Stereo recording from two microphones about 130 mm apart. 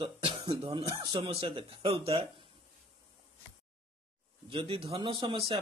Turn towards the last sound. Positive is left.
turn(degrees=-40)  # may be behind; listen again after turning